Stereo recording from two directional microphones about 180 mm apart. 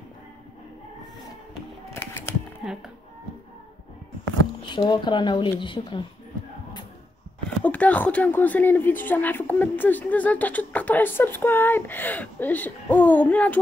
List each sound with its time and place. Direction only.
2.0 s typewriter: 10° left (ahead or behind)
4.6 s speech: 25° left (ahead or behind)
7.6 s speech: 10° left (ahead or behind)